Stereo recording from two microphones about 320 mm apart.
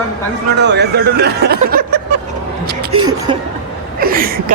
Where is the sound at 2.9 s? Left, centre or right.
Centre.